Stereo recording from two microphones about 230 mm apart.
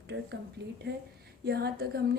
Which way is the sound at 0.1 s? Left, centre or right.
Right.